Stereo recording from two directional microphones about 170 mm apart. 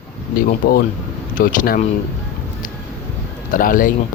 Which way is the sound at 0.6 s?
60° left (ahead or behind).